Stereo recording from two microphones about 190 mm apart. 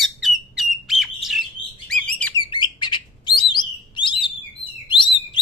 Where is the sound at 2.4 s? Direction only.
25° left (ahead or behind).